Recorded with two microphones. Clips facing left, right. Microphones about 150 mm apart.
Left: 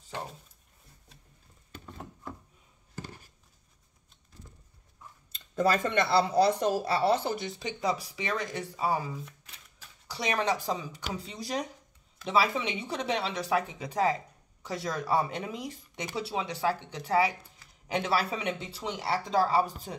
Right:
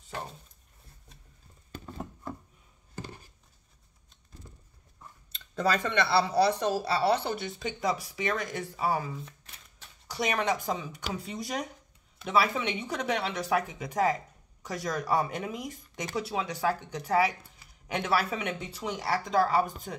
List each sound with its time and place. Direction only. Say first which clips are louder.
5.3 s speech: left 2 dB; 50° left (ahead or behind); by 9.1 s 30° left (ahead or behind)
10.1 s speech: even; 30° left (ahead or behind)